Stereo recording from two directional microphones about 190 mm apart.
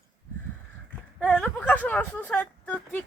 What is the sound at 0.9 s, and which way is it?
Speech, 5° left (ahead or behind).